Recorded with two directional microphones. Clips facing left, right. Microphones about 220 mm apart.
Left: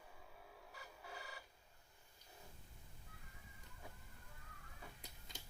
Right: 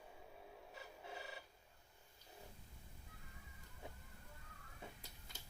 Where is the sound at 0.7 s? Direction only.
25° right (ahead or behind).